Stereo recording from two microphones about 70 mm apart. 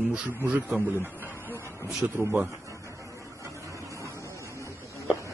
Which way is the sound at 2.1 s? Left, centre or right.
Right.